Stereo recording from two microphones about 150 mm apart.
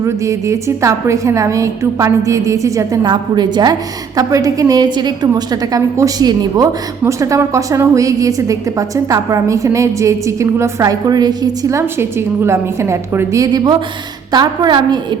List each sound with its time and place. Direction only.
0.0 s a woman's voice: 20° right (ahead or behind)